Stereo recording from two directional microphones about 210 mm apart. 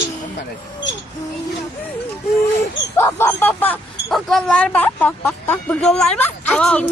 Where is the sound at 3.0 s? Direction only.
10° left (ahead or behind).